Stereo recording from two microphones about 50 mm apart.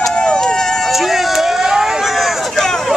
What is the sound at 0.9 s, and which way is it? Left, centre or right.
Vehicle, centre.